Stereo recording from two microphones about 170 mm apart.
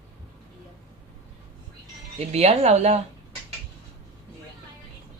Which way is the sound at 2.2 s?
40° right (ahead or behind).